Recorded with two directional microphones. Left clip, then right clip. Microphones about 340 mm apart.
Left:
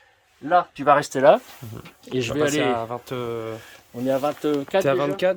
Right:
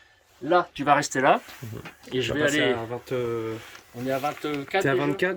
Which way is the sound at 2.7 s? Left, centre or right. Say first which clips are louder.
Left 2 dB; centre.